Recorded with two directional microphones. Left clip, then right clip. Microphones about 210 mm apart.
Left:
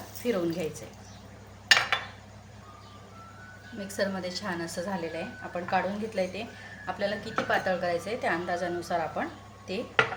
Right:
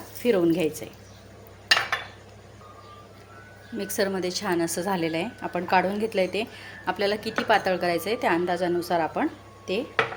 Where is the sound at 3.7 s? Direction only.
40° right (ahead or behind).